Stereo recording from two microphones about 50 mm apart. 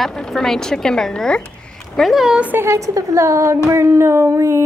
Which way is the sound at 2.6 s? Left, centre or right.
Right.